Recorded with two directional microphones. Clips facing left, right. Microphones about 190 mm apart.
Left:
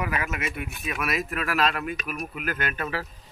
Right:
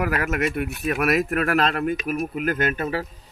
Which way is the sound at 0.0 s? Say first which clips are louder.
Right 6 dB; 65° right (ahead or behind).